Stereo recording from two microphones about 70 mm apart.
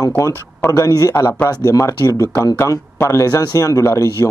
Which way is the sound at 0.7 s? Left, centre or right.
Left.